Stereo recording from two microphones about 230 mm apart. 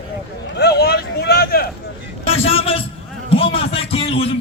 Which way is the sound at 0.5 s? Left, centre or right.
Left.